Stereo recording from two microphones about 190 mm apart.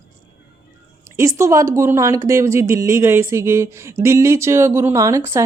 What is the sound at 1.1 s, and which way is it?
A woman's voice, 15° right (ahead or behind).